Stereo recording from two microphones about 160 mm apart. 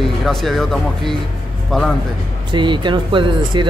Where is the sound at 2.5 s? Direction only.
30° right (ahead or behind).